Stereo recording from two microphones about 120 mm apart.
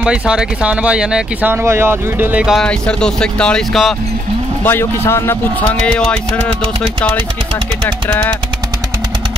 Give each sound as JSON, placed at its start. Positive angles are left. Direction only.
{"t": 0.0, "sound": "speech", "side_deg": -10}
{"t": 1.5, "sound": "speech", "side_deg": -20}
{"t": 2.4, "sound": "speech", "side_deg": 5}
{"t": 4.6, "sound": "speech", "side_deg": 20}
{"t": 5.9, "sound": "speech", "side_deg": 10}
{"t": 8.1, "sound": "speech", "side_deg": 15}